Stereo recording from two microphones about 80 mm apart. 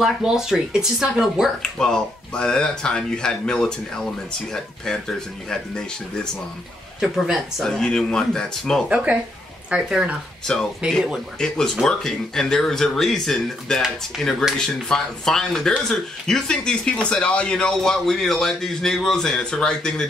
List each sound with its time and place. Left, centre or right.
0.0 s speech: centre
1.6 s speech: centre
7.0 s speech: centre
7.7 s speech: centre
8.8 s speech: centre
10.4 s speech: centre